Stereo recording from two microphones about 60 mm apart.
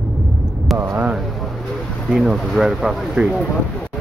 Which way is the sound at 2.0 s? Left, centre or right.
Centre.